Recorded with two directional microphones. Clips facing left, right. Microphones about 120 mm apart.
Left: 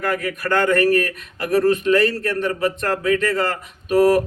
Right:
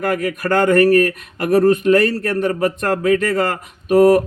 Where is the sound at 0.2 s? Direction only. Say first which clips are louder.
Right 3 dB; 40° right (ahead or behind).